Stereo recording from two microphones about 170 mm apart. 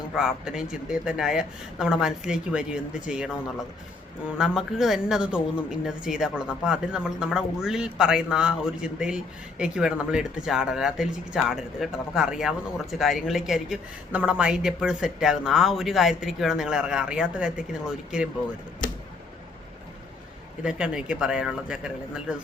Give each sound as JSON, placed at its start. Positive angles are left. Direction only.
{"t": 0.2, "sound": "speech", "side_deg": -5}
{"t": 4.4, "sound": "speech", "side_deg": 0}
{"t": 20.7, "sound": "speech", "side_deg": -5}